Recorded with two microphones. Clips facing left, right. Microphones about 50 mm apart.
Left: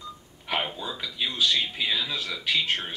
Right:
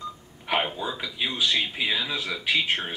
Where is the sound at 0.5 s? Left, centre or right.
Centre.